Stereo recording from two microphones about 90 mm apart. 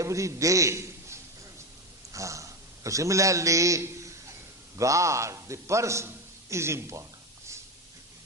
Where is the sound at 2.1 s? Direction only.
35° right (ahead or behind).